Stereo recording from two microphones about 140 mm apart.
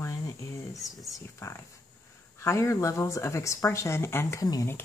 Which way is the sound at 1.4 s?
20° left (ahead or behind).